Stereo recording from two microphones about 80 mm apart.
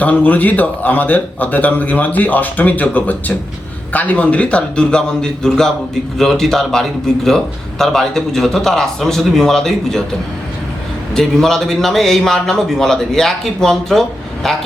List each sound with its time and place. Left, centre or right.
0.0 s a man's voice: centre
11.1 s a man's voice: centre